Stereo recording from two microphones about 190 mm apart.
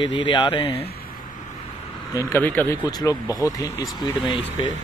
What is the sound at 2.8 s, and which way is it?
Speech, 20° left (ahead or behind).